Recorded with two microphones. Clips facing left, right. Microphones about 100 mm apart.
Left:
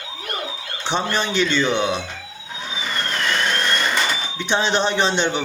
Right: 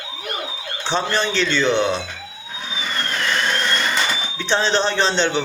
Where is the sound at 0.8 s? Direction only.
15° left (ahead or behind).